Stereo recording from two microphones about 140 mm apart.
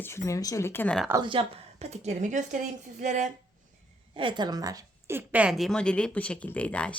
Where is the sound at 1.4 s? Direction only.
40° right (ahead or behind).